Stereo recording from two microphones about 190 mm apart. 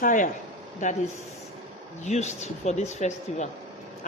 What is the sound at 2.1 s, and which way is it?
Speech, 35° left (ahead or behind).